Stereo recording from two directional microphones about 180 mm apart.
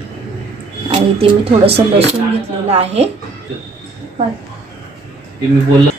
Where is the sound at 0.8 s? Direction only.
30° right (ahead or behind).